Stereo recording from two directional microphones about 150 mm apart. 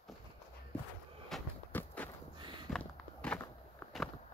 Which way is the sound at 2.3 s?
30° right (ahead or behind).